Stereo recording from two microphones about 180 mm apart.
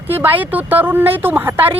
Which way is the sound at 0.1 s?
10° right (ahead or behind).